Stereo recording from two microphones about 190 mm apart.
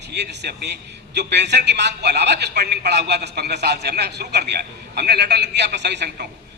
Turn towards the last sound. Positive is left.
turn(degrees=-60)  # may be behind; listen again after turning